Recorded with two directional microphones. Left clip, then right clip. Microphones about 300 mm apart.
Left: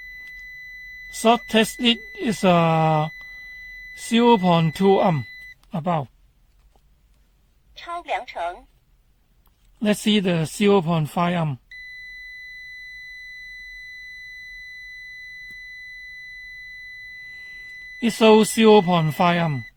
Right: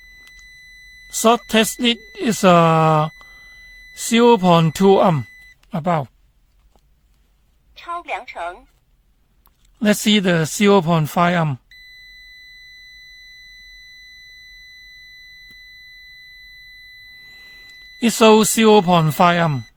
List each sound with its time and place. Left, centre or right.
1.1 s speech: right
7.7 s a woman's voice: centre
9.4 s speech: right
18.0 s speech: right